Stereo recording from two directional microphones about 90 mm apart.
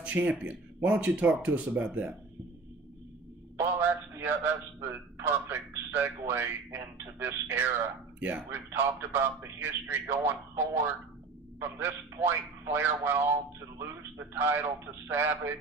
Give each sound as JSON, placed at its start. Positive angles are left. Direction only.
{"t": 0.0, "sound": "speech", "side_deg": -15}
{"t": 3.6, "sound": "a man's voice", "side_deg": -25}
{"t": 11.6, "sound": "a man's voice", "side_deg": -25}